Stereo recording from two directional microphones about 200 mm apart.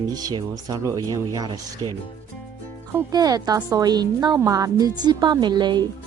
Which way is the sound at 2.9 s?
20° right (ahead or behind).